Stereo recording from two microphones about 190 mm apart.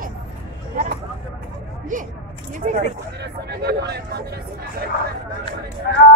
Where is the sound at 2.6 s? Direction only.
40° right (ahead or behind).